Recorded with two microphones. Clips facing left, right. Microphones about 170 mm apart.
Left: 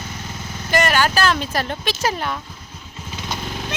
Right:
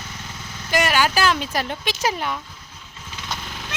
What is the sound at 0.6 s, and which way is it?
Speech, 10° right (ahead or behind).